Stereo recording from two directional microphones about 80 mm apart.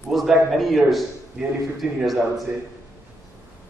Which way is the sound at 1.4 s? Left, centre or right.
Centre.